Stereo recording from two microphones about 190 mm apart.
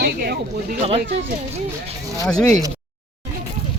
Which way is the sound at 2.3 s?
5° left (ahead or behind).